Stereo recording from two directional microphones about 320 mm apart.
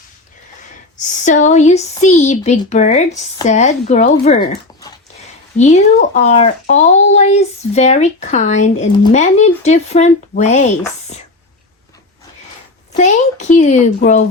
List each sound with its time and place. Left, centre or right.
1.0 s speech: left
12.9 s speech: left